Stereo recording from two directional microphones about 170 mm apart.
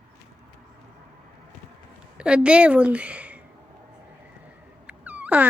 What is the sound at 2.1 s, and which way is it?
A woman's voice, 5° right (ahead or behind).